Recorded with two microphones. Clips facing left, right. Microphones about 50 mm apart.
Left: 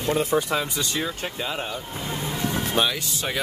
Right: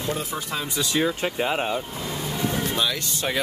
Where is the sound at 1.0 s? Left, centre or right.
Right.